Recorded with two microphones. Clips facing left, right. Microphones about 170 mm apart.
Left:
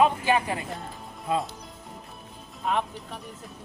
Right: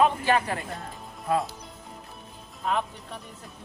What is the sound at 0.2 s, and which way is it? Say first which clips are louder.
Speech: even; 15° left (ahead or behind).